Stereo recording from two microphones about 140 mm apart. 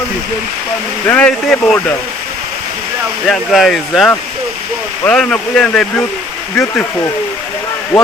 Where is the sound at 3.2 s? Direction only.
Centre (ahead or behind).